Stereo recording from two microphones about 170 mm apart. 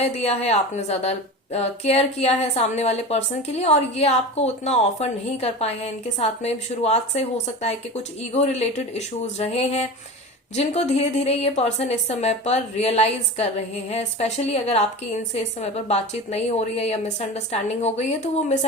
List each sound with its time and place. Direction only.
0.0 s a woman's voice: 40° left (ahead or behind)